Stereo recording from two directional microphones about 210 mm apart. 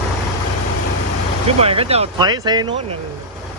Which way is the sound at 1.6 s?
30° right (ahead or behind).